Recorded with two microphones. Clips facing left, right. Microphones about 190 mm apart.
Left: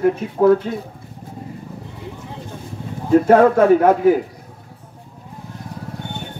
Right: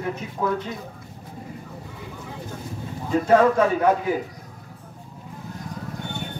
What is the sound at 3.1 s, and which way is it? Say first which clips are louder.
Speech: left 6 dB; 55° left (ahead or behind).